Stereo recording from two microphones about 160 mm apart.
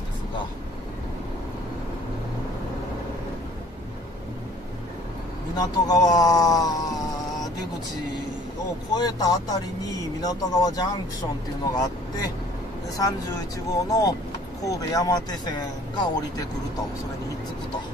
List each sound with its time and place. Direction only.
5.6 s speech: 25° left (ahead or behind)
8.9 s speech: 25° left (ahead or behind)